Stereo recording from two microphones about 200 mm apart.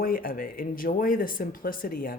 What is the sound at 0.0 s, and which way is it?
Speech, 45° left (ahead or behind).